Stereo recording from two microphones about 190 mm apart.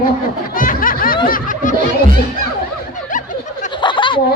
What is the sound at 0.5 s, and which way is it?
Snicker, 45° left (ahead or behind).